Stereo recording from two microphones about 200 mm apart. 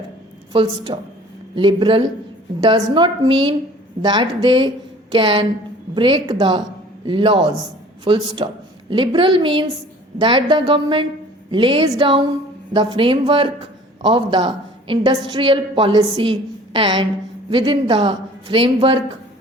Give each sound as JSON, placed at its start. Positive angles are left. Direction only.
{"t": 0.5, "sound": "a woman's voice", "side_deg": -25}